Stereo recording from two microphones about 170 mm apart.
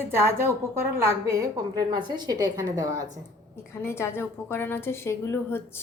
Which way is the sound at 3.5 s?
15° left (ahead or behind).